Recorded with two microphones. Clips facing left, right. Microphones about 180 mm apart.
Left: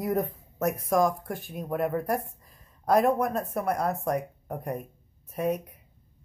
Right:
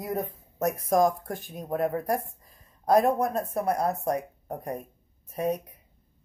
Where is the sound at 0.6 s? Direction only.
35° right (ahead or behind).